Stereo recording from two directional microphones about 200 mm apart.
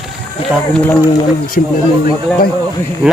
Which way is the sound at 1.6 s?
45° left (ahead or behind).